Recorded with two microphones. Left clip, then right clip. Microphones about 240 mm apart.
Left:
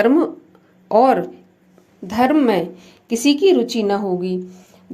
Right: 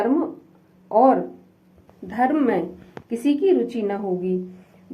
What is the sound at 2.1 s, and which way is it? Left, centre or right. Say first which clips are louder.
Speech: left 5 dB; left.